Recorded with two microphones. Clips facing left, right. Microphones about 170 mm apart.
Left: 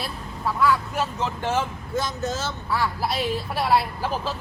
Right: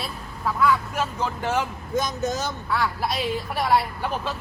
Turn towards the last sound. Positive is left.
turn(degrees=0)  # may be behind; listen again after turning